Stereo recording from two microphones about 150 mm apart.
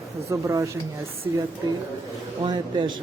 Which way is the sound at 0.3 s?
20° right (ahead or behind).